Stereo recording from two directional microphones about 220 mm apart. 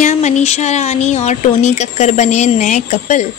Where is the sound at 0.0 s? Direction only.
30° left (ahead or behind).